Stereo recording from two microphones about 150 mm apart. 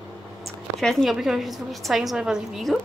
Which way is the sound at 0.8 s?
Centre (ahead or behind).